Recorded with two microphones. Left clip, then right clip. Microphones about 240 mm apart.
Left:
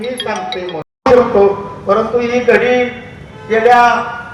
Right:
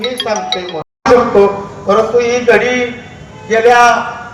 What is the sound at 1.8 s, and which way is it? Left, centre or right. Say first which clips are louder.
A man's voice: right 3 dB; right.